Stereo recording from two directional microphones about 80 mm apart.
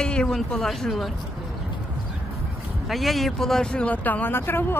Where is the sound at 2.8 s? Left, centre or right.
Centre; by 4.7 s left.